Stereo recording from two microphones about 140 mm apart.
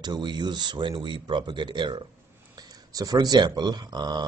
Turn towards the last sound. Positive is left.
turn(degrees=-30)  # may be behind; listen again after turning